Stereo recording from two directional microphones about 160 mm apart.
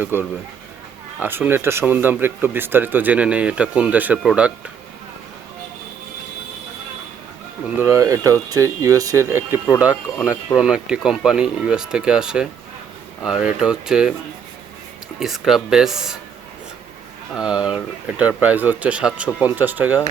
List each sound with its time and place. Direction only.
0.0 s speech: 15° right (ahead or behind)
7.8 s speech: 20° right (ahead or behind)
10.2 s speech: centre (ahead or behind)
15.2 s speech: centre (ahead or behind)
17.3 s speech: 5° right (ahead or behind)